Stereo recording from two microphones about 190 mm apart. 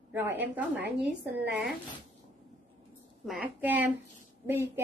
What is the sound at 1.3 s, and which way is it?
Speech, 60° right (ahead or behind).